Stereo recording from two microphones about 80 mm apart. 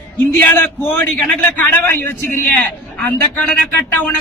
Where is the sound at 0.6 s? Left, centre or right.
Left.